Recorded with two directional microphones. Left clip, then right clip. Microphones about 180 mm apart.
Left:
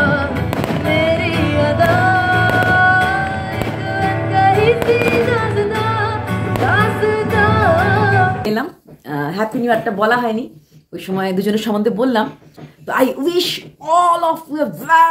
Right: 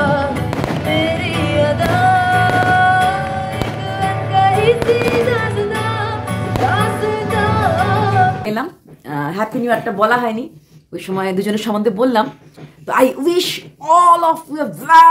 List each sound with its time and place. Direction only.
0.0 s music: 70° right (ahead or behind)
9.1 s speech: 10° right (ahead or behind)